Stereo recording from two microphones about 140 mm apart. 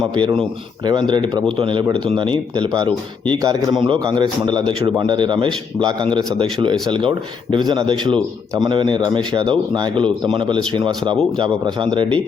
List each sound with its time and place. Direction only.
0.1 s speech: 35° right (ahead or behind)